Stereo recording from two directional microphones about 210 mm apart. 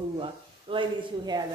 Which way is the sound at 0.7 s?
20° right (ahead or behind).